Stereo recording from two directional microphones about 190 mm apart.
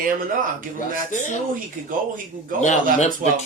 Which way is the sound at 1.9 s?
45° right (ahead or behind).